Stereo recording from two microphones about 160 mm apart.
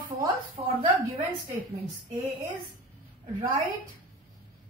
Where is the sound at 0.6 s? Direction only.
20° right (ahead or behind).